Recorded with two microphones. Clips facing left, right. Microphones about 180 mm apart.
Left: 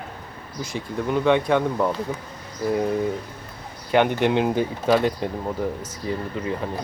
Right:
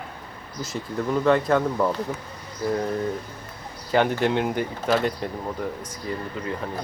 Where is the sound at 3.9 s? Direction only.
15° left (ahead or behind).